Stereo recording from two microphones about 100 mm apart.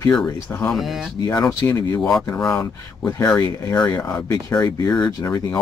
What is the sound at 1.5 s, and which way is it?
Speech, 35° left (ahead or behind).